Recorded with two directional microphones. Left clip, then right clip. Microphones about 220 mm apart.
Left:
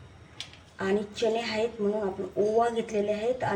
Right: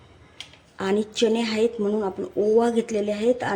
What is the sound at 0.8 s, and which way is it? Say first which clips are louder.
A woman's voice: right 5 dB; 45° right (ahead or behind).